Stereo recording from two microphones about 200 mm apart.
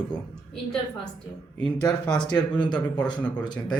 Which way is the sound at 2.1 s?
5° left (ahead or behind).